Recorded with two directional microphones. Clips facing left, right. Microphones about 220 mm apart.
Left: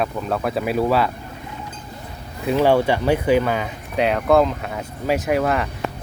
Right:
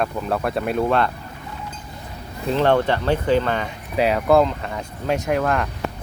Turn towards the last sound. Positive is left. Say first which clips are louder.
# left 1 dB
turn(degrees=5)  # may be behind; listen again after turning